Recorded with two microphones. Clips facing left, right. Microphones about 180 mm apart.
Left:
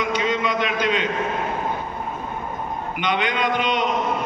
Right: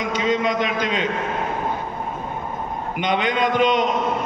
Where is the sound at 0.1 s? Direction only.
45° right (ahead or behind).